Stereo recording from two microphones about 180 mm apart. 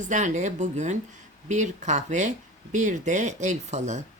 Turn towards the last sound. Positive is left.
turn(degrees=-40)  # may be behind; listen again after turning